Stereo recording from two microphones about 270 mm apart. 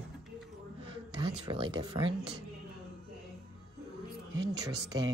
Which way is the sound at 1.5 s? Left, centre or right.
Centre.